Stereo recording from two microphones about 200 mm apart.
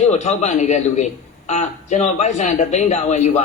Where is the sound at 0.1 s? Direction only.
35° left (ahead or behind).